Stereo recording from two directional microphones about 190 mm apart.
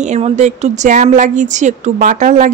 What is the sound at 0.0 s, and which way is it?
A woman's voice, 35° right (ahead or behind).